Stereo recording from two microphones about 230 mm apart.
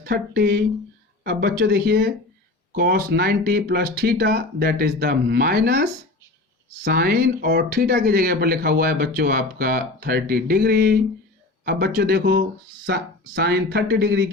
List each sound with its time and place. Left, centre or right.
0.0 s speech: right